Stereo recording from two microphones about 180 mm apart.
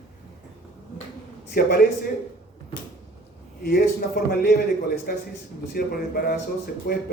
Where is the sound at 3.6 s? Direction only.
55° left (ahead or behind).